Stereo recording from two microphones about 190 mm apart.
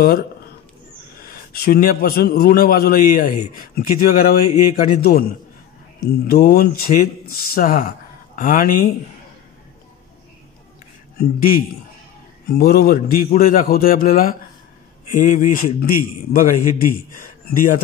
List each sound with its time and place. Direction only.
1.5 s a man's voice: 50° left (ahead or behind)
11.1 s a man's voice: 50° left (ahead or behind)